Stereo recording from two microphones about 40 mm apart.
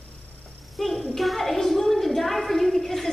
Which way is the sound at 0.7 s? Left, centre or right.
Centre.